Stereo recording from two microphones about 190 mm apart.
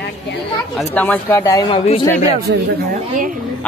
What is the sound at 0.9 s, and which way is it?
Speech, 10° left (ahead or behind).